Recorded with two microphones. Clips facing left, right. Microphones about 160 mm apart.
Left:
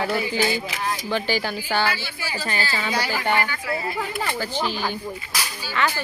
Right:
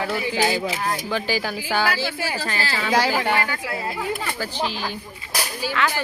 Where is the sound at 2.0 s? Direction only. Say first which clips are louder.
Right 5 dB; 80° right.